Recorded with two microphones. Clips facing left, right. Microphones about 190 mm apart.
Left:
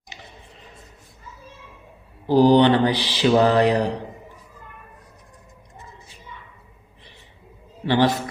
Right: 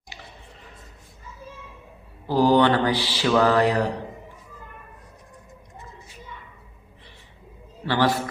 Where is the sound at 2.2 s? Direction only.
20° left (ahead or behind).